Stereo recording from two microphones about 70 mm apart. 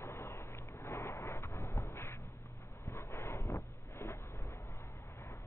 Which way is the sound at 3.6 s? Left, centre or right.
Left.